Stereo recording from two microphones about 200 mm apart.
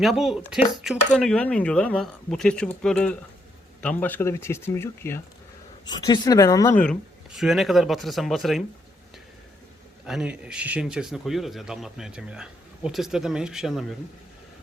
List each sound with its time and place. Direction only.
0.0 s a man's voice: centre (ahead or behind)
7.3 s a man's voice: centre (ahead or behind)
10.1 s a man's voice: 5° right (ahead or behind)